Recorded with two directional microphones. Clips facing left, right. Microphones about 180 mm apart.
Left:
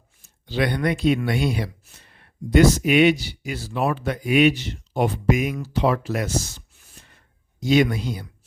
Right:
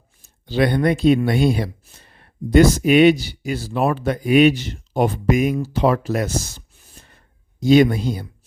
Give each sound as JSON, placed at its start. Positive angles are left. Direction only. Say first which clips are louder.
{"t": 0.4, "sound": "speech", "louder": "right 5 dB", "side_deg": -35}
{"t": 6.9, "sound": "a sound", "louder": "right 3 dB", "side_deg": -35}
{"t": 7.6, "sound": "speech", "louder": "right 5 dB", "side_deg": -35}